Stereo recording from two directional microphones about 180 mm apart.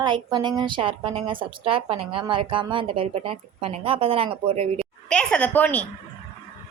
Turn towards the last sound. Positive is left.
turn(degrees=10)  # may be behind; listen again after turning